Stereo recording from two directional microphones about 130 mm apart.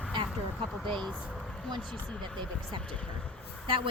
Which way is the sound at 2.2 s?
40° right (ahead or behind).